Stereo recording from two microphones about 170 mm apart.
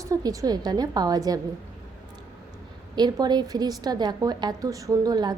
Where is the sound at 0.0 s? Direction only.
20° right (ahead or behind).